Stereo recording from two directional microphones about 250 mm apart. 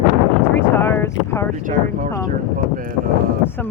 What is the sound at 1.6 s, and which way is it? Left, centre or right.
Speech, right.